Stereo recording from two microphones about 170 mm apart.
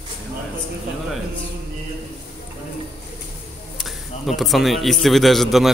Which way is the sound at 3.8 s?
Centre (ahead or behind).